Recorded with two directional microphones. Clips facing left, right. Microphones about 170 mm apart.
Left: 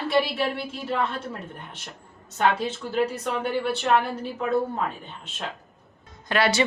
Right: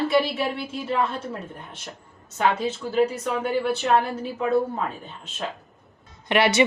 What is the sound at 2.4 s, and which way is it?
Speech, centre (ahead or behind).